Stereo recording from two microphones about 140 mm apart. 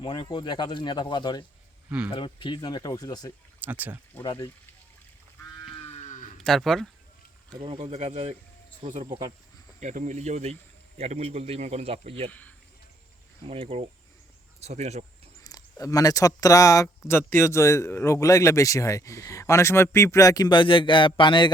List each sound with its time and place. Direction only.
0.0 s speech: 35° left (ahead or behind)
3.6 s speech: 10° right (ahead or behind)
4.2 s speech: 35° left (ahead or behind)
5.8 s moo: 50° left (ahead or behind)
6.4 s speech: 5° left (ahead or behind)
7.6 s speech: 40° right (ahead or behind)
7.9 s speech: 50° right (ahead or behind)
8.8 s speech: 35° right (ahead or behind)
9.8 s speech: 60° right (ahead or behind); by 12.3 s 45° right (ahead or behind)
12.3 s speech: 10° left (ahead or behind)
13.4 s speech: 40° right (ahead or behind)
15.4 s speech: 25° left (ahead or behind)